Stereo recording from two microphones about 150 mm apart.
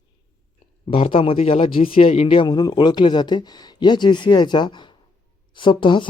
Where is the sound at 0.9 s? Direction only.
40° left (ahead or behind).